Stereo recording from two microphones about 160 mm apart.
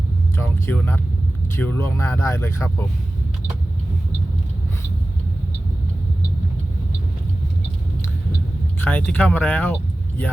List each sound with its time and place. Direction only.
0.3 s speech: 15° left (ahead or behind)
8.8 s speech: 10° left (ahead or behind)